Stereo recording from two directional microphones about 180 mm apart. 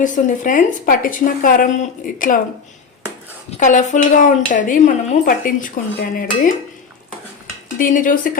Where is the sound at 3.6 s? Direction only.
45° left (ahead or behind).